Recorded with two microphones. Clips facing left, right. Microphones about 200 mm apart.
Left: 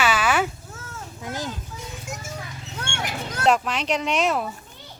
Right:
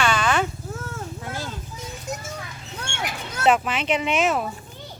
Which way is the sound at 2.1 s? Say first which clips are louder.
Right 5 dB; 35° right (ahead or behind).